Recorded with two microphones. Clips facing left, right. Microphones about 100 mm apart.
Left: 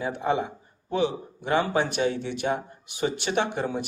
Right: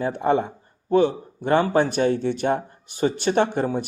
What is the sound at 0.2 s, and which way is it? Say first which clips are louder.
A man's voice: right 5 dB; 50° right (ahead or behind).